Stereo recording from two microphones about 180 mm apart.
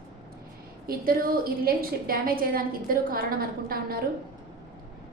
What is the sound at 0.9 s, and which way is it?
A woman's voice, 55° right (ahead or behind).